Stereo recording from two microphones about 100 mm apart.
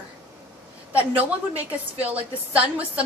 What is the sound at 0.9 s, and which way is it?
A woman's voice, 15° right (ahead or behind).